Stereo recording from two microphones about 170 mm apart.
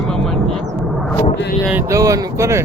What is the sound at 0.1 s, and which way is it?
Vehicle, 5° left (ahead or behind).